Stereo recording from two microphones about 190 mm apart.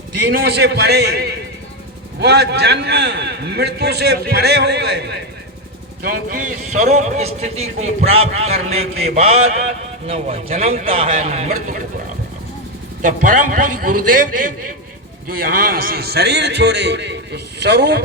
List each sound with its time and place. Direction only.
0.3 s a man's voice: 60° right (ahead or behind)
6.0 s a man's voice: 50° right (ahead or behind)
15.7 s a man's voice: 55° right (ahead or behind)